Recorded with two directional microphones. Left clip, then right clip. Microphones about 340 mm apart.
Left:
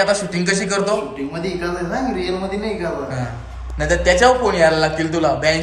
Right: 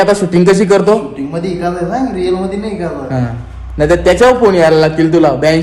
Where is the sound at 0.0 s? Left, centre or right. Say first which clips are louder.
Right 8 dB; centre.